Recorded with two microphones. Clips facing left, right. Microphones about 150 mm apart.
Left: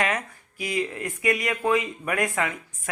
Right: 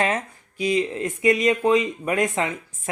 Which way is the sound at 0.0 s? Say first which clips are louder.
Right 3 dB; 25° right (ahead or behind).